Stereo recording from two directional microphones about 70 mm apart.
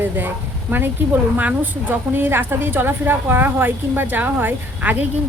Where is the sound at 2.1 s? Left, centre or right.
Right.